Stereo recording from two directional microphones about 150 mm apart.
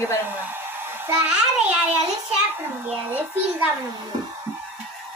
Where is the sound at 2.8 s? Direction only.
10° right (ahead or behind).